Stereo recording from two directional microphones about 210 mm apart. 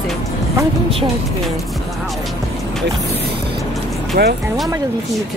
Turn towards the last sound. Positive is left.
turn(degrees=-45)  # may be behind; listen again after turning